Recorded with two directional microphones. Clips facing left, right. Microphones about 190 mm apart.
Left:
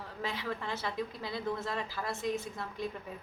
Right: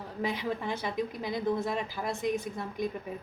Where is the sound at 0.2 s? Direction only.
15° right (ahead or behind).